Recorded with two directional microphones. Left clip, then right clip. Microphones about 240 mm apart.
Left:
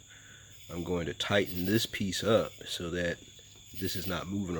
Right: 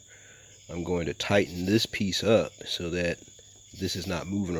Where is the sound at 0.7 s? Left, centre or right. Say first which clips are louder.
Right 4 dB; right.